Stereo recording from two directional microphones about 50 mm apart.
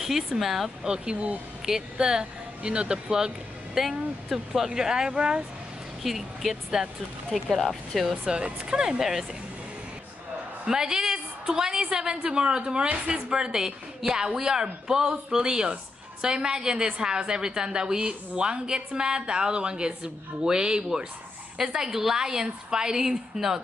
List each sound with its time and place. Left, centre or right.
0.0 s speech: centre
0.8 s a woman's voice: centre
1.1 s speech: right
1.7 s a woman's voice: centre
6.0 s speech: centre
8.3 s a woman's voice: centre
10.6 s a woman's voice: centre